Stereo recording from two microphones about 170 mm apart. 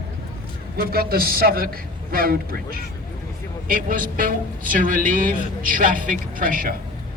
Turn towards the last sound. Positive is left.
turn(degrees=-55)  # may be behind; listen again after turning